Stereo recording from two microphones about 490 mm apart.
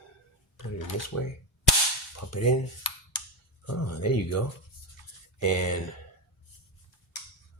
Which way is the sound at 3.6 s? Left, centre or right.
Left.